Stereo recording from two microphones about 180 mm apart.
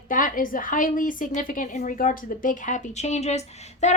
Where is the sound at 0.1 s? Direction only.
50° left (ahead or behind).